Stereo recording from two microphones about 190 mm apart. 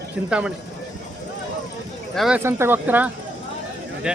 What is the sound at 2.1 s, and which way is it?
Speech, centre (ahead or behind).